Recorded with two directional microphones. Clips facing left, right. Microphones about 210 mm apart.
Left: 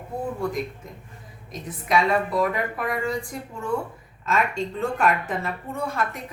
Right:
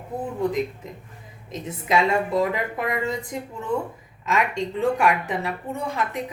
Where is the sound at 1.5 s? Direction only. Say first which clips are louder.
Right 2 dB; 25° right (ahead or behind).